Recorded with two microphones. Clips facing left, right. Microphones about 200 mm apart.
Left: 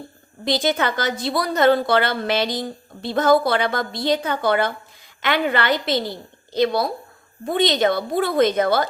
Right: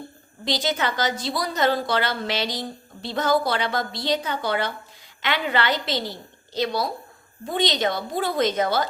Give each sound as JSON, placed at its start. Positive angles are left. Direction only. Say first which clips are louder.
{"t": 0.4, "sound": "a woman's voice", "louder": "left 4 dB", "side_deg": 55}